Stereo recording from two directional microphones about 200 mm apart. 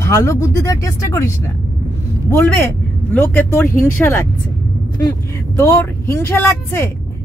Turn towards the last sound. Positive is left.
turn(degrees=10)  # may be behind; listen again after turning